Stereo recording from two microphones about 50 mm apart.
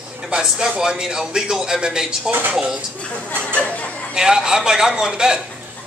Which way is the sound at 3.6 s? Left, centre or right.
Left.